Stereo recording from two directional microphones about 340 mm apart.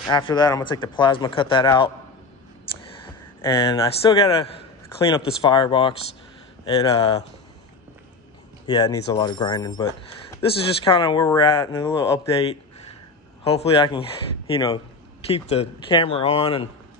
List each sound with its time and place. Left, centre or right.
0.1 s speech: centre
3.1 s a man's voice: centre
8.6 s speech: centre